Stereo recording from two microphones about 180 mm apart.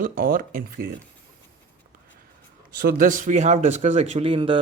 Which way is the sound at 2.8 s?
50° right (ahead or behind).